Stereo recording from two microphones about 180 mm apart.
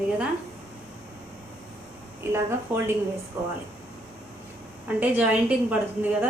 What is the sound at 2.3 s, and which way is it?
A woman's voice, 15° right (ahead or behind).